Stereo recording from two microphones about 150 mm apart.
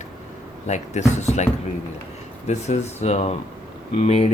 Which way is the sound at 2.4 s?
50° left (ahead or behind).